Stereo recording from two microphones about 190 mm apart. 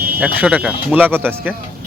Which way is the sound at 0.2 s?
5° right (ahead or behind).